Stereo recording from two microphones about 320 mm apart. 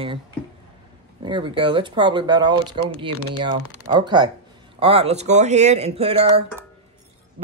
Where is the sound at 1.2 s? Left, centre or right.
Centre.